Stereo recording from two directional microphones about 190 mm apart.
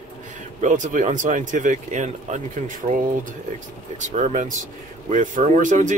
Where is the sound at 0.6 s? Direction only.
40° right (ahead or behind).